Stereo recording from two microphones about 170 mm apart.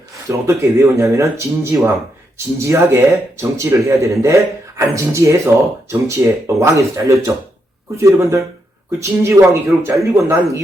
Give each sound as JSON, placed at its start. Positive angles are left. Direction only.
{"t": 0.3, "sound": "speech", "side_deg": -15}